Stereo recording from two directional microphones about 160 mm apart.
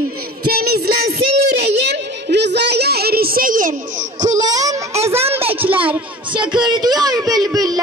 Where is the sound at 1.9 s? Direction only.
90° right; by 4.5 s 50° right (ahead or behind).